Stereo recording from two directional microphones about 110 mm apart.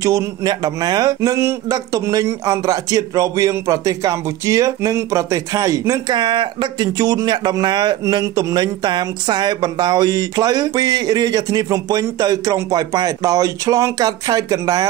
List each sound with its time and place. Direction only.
0.0 s speech: 30° right (ahead or behind)